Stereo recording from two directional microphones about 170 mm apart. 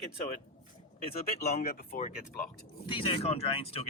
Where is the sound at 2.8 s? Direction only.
30° left (ahead or behind).